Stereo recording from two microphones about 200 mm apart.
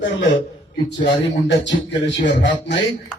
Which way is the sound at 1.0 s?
60° left (ahead or behind).